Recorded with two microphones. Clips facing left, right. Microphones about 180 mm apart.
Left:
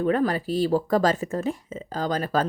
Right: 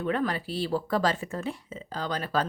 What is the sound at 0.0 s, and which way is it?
A woman's voice, 40° left (ahead or behind).